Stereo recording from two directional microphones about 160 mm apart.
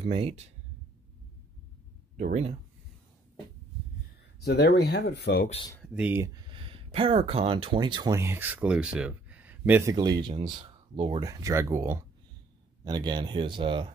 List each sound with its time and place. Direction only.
0.0 s speech: 35° right (ahead or behind)
2.1 s speech: 45° right (ahead or behind)
4.4 s speech: 90° left
5.9 s speech: 15° right (ahead or behind)
6.5 s speech: 35° right (ahead or behind)
11.2 s speech: 20° right (ahead or behind)